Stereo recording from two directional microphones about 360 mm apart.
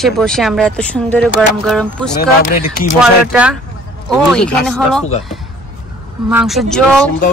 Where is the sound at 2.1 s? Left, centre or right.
Left.